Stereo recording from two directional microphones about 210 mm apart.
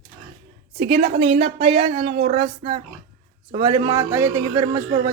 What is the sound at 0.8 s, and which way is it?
Speech, 40° right (ahead or behind).